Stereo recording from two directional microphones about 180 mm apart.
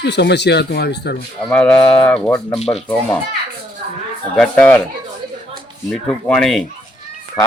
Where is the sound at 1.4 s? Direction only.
5° left (ahead or behind).